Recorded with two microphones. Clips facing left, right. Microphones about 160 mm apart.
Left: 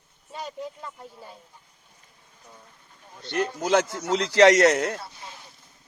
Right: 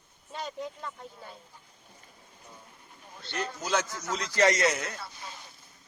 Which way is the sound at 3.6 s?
60° left (ahead or behind).